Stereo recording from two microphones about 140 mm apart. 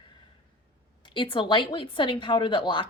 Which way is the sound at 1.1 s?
35° left (ahead or behind).